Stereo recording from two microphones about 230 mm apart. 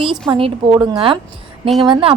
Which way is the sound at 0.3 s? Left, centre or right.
Right.